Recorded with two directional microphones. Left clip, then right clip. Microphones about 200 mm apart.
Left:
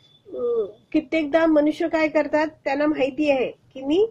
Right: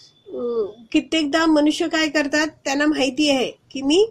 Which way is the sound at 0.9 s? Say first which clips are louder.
Right 1 dB; 30° right (ahead or behind).